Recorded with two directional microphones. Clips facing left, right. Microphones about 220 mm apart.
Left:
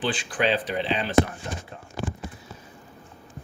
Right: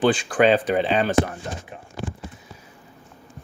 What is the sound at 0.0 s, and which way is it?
Speech, 45° right (ahead or behind).